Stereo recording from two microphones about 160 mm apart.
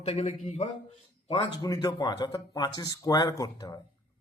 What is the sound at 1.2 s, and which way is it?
A man's voice, 30° left (ahead or behind).